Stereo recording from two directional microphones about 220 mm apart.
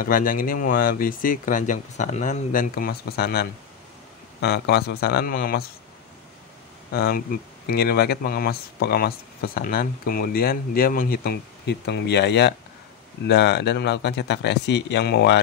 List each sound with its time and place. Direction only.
0.0 s speech: 40° left (ahead or behind)
6.9 s speech: 45° left (ahead or behind)